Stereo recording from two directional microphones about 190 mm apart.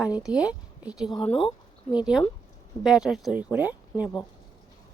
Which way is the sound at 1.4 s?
25° left (ahead or behind).